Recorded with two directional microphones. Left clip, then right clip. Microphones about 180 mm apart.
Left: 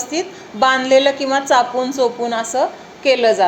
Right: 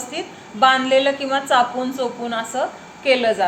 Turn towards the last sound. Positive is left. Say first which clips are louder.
# left 3 dB
turn(degrees=30)  # may be behind; listen again after turning